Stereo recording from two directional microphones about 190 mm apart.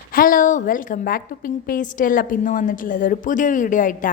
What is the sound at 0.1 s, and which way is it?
A woman's voice, 45° left (ahead or behind).